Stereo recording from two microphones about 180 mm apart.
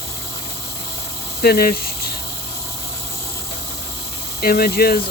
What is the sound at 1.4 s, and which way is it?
Speech, 60° left (ahead or behind).